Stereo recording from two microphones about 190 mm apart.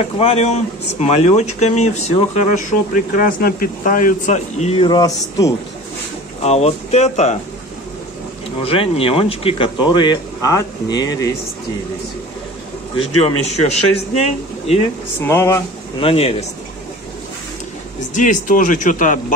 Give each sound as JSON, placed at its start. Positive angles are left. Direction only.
{"t": 0.2, "sound": "speech", "side_deg": 35}
{"t": 6.4, "sound": "speech", "side_deg": 35}
{"t": 8.6, "sound": "speech", "side_deg": 30}
{"t": 12.9, "sound": "speech", "side_deg": 35}
{"t": 15.1, "sound": "speech", "side_deg": 15}
{"t": 16.0, "sound": "speech", "side_deg": 30}
{"t": 18.1, "sound": "speech", "side_deg": 40}